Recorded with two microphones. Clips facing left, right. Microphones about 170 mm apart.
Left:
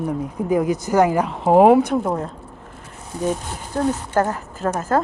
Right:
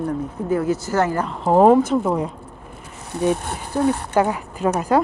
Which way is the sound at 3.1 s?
65° right (ahead or behind).